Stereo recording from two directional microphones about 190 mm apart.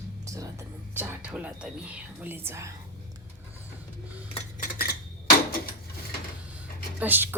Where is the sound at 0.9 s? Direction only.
5° right (ahead or behind).